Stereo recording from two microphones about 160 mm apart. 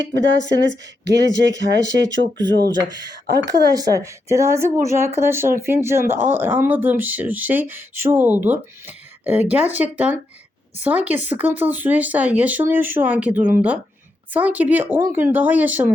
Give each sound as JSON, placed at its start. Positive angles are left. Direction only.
{"t": 1.1, "sound": "speech", "side_deg": -90}
{"t": 1.8, "sound": "speech", "side_deg": -25}